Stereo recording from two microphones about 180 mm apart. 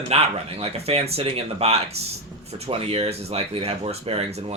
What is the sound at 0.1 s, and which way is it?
Speech, 35° right (ahead or behind).